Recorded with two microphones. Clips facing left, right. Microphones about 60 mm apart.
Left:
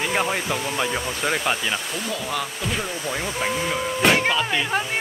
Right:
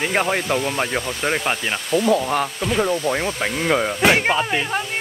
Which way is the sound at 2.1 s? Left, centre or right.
Right.